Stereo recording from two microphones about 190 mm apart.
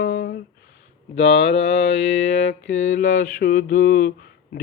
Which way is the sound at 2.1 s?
40° left (ahead or behind).